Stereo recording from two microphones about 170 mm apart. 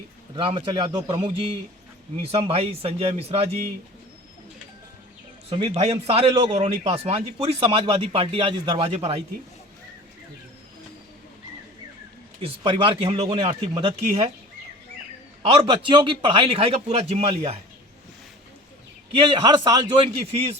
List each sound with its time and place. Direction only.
0.3 s a man's voice: 30° right (ahead or behind)
5.5 s a man's voice: 35° right (ahead or behind)
12.4 s a man's voice: 30° right (ahead or behind)
15.4 s a man's voice: 30° right (ahead or behind)
19.1 s a man's voice: 30° right (ahead or behind)
20.2 s a man's voice: 35° right (ahead or behind)